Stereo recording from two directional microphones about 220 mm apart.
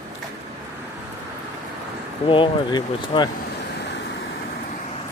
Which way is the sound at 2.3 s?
20° left (ahead or behind).